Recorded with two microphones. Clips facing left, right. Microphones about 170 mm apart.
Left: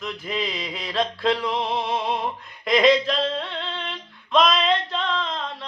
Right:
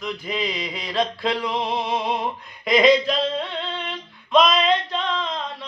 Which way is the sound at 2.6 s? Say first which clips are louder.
Right 1 dB; centre (ahead or behind).